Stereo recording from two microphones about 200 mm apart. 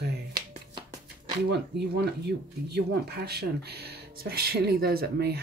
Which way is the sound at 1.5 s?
55° right (ahead or behind).